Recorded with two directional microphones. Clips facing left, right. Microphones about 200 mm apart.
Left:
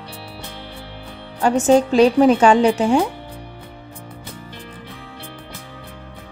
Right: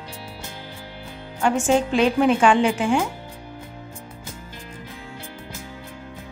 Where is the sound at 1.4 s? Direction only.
40° left (ahead or behind).